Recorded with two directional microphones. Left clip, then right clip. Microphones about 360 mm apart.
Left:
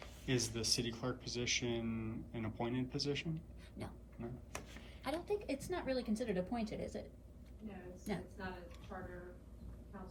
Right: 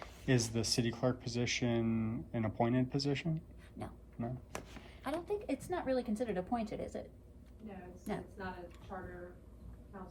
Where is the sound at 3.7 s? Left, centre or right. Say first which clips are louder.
Right 5 dB; centre.